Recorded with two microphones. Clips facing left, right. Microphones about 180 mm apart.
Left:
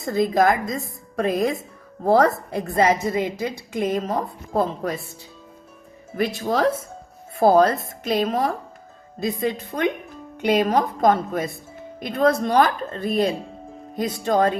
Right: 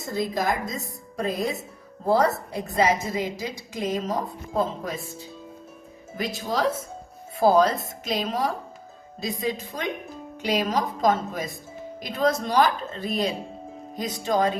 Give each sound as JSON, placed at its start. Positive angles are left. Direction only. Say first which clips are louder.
{"t": 0.0, "sound": "a woman's voice", "louder": "left 7 dB", "side_deg": 55}
{"t": 6.1, "sound": "a woman's voice", "louder": "left 5 dB", "side_deg": 55}